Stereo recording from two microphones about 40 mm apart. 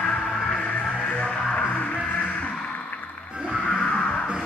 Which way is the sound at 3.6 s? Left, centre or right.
Left.